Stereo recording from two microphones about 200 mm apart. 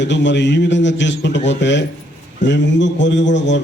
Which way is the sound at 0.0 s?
65° left (ahead or behind).